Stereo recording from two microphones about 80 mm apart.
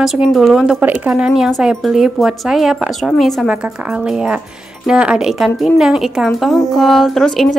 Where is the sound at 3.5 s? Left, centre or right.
Centre.